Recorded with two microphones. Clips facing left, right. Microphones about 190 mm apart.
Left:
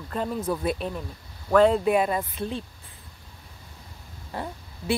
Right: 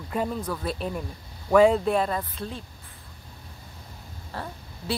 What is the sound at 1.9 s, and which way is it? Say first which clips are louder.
Speech: left 2 dB; 10° left (ahead or behind).